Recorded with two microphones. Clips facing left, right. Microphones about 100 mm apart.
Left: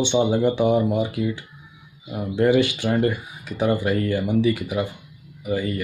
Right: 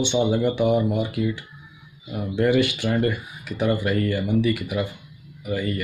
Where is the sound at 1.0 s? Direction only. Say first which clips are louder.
Left 1 dB; 15° left (ahead or behind).